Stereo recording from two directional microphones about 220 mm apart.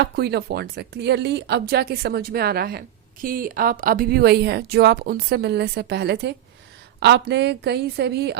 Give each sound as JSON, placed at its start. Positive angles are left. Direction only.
{"t": 0.0, "sound": "speech", "side_deg": -45}